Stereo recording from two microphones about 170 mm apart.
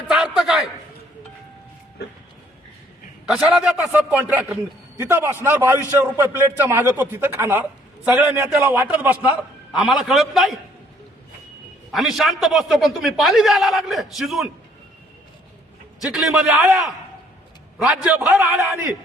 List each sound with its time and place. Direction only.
0.1 s a sound: centre (ahead or behind)
3.2 s a man's voice: 5° right (ahead or behind)
11.9 s a man's voice: centre (ahead or behind)
16.1 s a man's voice: 5° right (ahead or behind)